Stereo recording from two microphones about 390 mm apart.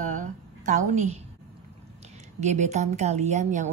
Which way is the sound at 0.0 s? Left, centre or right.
Centre.